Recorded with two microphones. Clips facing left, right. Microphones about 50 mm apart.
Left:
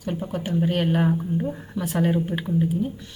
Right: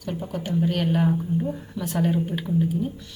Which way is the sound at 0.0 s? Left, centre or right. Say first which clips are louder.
Left 2 dB; centre.